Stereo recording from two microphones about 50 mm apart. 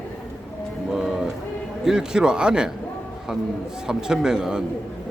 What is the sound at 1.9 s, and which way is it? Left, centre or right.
Speech, centre.